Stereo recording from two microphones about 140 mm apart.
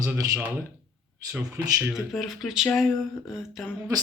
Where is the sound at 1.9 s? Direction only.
Centre (ahead or behind).